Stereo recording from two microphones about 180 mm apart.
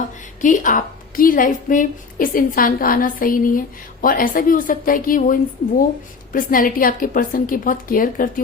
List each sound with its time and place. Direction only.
0.4 s a woman's voice: 45° left (ahead or behind)